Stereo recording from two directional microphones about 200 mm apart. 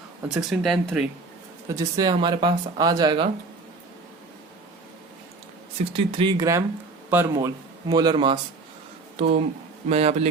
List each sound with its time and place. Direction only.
0.3 s speech: centre (ahead or behind)
1.6 s speech: 15° right (ahead or behind)
6.1 s speech: 25° right (ahead or behind)